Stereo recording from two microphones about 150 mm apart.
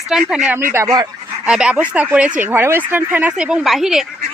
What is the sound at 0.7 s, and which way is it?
Speech, 25° right (ahead or behind).